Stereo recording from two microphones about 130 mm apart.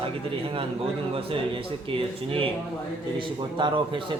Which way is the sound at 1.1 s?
45° right (ahead or behind).